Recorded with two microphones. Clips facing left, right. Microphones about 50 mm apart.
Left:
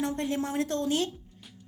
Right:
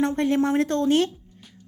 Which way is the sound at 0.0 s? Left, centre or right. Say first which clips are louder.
Right 8 dB; right.